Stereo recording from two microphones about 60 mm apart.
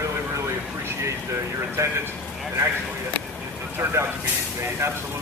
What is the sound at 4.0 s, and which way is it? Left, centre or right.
Speech, right.